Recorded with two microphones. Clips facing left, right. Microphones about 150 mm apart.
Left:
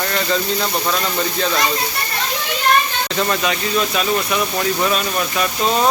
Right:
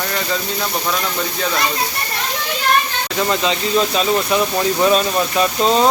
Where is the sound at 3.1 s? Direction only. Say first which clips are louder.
Right 2 dB; 20° right (ahead or behind).